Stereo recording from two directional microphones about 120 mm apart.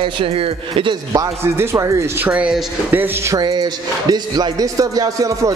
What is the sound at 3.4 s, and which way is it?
Speech, 35° right (ahead or behind).